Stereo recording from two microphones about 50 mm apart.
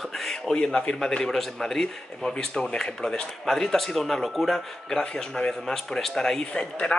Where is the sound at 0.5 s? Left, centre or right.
Centre.